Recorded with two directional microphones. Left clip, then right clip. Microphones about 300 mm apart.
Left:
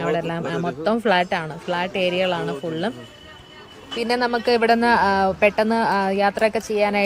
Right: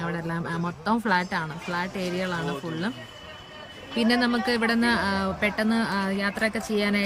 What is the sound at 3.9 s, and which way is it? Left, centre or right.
Speech, centre.